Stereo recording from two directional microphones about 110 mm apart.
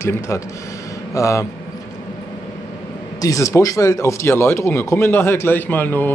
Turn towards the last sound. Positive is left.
turn(degrees=15)  # may be behind; listen again after turning